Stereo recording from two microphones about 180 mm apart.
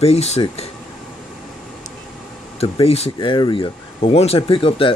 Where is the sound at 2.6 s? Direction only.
35° left (ahead or behind).